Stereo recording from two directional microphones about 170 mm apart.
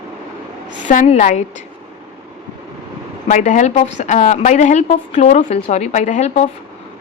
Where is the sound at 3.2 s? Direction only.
45° left (ahead or behind).